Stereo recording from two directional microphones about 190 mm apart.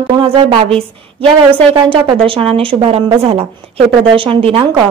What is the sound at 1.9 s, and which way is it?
A woman's voice, 30° right (ahead or behind).